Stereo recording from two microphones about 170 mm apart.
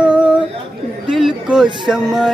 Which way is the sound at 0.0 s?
5° right (ahead or behind).